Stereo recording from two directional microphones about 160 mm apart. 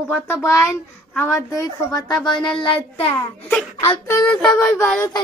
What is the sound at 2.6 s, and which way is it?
Speech, 35° left (ahead or behind).